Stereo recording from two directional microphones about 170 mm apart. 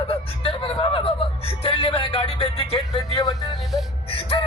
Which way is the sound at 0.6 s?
30° left (ahead or behind).